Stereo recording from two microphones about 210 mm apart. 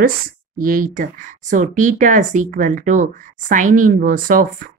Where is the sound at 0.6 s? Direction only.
40° right (ahead or behind).